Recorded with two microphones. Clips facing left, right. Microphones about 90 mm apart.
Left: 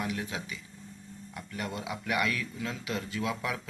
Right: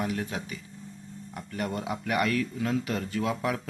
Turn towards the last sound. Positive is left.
turn(degrees=-40)  # may be behind; listen again after turning